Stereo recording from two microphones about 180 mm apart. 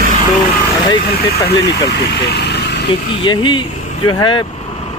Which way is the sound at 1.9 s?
70° left (ahead or behind).